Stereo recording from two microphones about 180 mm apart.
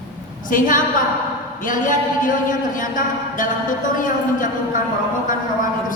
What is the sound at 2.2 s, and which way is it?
A man's voice, 45° left (ahead or behind).